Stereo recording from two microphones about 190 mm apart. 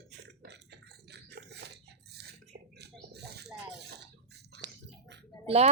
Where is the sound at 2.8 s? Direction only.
60° right (ahead or behind).